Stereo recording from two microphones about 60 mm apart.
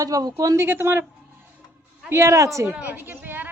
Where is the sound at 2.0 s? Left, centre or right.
Right.